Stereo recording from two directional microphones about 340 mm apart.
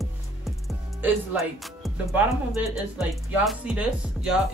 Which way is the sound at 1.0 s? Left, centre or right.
Centre.